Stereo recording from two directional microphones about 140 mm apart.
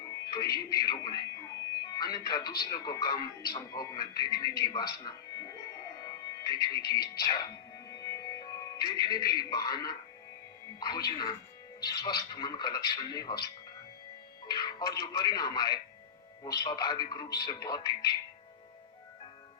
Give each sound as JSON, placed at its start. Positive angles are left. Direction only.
{"t": 0.0, "sound": "a man's voice", "side_deg": 25}
{"t": 6.0, "sound": "music", "side_deg": 30}
{"t": 10.8, "sound": "a man's voice", "side_deg": 30}
{"t": 14.4, "sound": "a man's voice", "side_deg": 30}